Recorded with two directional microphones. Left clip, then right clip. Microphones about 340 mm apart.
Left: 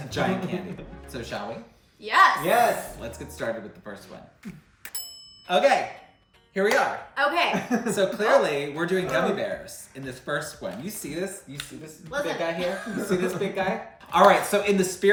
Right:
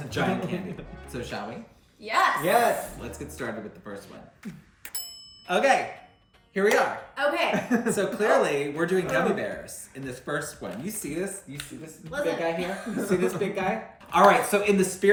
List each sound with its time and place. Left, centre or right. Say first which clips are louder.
0.1 s speech: left 1 dB; centre
4.8 s ding: even; centre
6.5 s speech: even; centre